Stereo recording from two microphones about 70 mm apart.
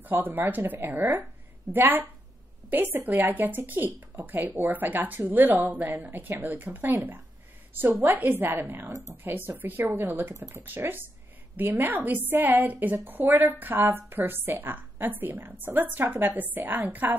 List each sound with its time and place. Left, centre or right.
0.0 s a woman's voice: right
10.3 s speech: right
10.6 s a woman's voice: right